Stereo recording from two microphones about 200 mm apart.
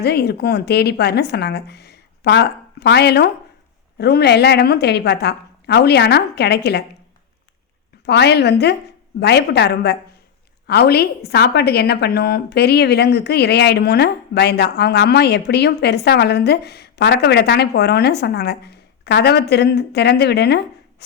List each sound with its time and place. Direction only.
0.0 s a woman's voice: 55° left (ahead or behind)
8.0 s a woman's voice: 55° left (ahead or behind)